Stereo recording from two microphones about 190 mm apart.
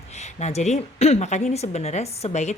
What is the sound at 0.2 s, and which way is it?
Speech, 35° left (ahead or behind).